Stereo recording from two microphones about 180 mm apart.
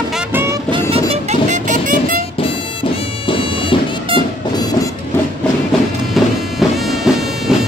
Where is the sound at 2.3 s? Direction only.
30° left (ahead or behind).